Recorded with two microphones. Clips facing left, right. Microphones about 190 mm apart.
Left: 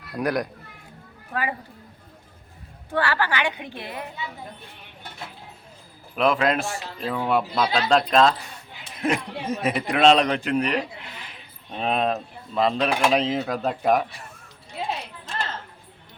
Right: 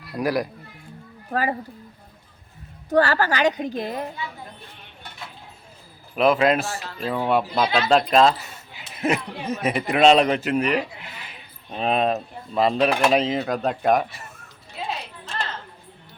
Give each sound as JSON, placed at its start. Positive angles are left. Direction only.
{"t": 0.1, "sound": "speech", "side_deg": -5}
{"t": 1.3, "sound": "a woman's voice", "side_deg": -40}
{"t": 2.9, "sound": "a woman's voice", "side_deg": -40}
{"t": 6.1, "sound": "speech", "side_deg": -5}